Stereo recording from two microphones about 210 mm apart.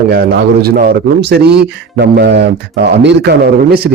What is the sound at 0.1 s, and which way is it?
A man's voice, 50° right (ahead or behind).